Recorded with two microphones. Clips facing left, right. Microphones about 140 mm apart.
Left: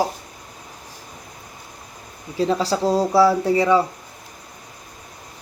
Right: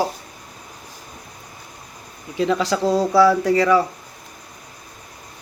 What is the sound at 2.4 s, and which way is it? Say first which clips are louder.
A man's voice: even; 35° left (ahead or behind).